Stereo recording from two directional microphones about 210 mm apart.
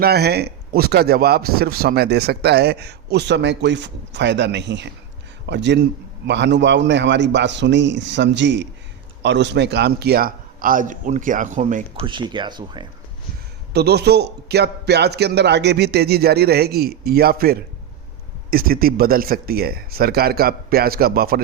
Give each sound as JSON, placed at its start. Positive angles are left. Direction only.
{"t": 0.0, "sound": "a man's voice", "side_deg": -50}
{"t": 12.0, "sound": "speech", "side_deg": -20}
{"t": 13.7, "sound": "speech", "side_deg": -50}